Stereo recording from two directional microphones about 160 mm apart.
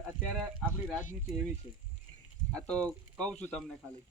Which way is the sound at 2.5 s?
5° left (ahead or behind).